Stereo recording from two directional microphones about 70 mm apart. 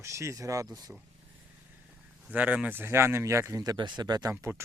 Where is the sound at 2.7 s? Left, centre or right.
Right.